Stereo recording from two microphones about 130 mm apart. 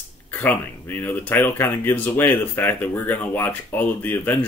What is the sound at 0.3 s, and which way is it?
Speech, 15° left (ahead or behind).